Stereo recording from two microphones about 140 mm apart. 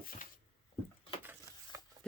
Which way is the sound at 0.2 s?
75° left (ahead or behind).